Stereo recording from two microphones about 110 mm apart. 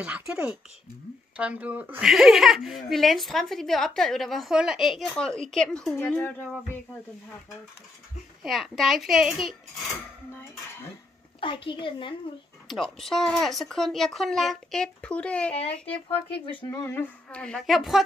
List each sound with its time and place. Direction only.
0.0 s speech: 15° right (ahead or behind)
2.0 s a woman's voice: 5° right (ahead or behind)
5.9 s a woman's voice: 20° left (ahead or behind)
8.4 s a woman's voice: 5° right (ahead or behind)
11.4 s a woman's voice: 50° left (ahead or behind)
12.6 s a woman's voice: centre (ahead or behind)
15.5 s speech: 65° left (ahead or behind)
16.9 s a woman's voice: 15° left (ahead or behind); by 18.0 s centre (ahead or behind)